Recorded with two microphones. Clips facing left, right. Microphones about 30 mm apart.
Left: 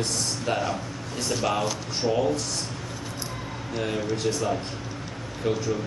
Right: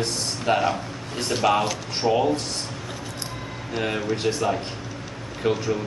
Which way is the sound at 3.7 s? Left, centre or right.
Right.